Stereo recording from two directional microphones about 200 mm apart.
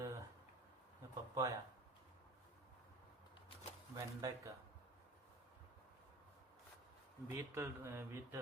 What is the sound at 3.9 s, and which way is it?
Speech, 15° right (ahead or behind).